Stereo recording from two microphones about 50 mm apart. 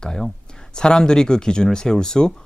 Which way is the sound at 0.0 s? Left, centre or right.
Centre.